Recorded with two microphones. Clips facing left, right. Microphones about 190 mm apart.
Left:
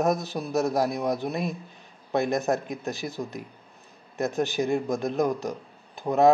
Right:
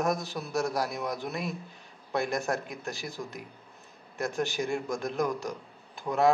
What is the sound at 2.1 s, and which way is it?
A man's voice, 20° left (ahead or behind).